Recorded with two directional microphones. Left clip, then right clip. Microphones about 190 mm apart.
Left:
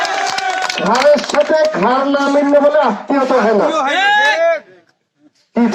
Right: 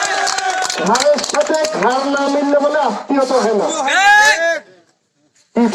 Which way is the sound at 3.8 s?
15° left (ahead or behind).